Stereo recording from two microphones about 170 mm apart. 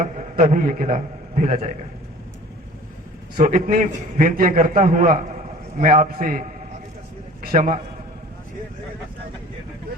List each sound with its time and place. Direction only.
0.0 s a man's voice: 50° right (ahead or behind)
3.3 s a man's voice: 50° right (ahead or behind)
7.5 s a man's voice: 50° right (ahead or behind)